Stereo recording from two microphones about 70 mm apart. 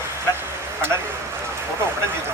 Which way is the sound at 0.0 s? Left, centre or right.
Right.